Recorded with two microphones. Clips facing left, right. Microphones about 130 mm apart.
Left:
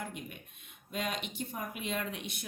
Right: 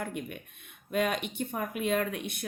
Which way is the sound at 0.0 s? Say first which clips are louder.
Right 6 dB; 55° right (ahead or behind).